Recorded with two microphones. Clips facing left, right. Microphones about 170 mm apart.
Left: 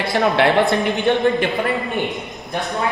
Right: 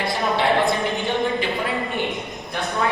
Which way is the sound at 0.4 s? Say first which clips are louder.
Left 2 dB; 70° left (ahead or behind).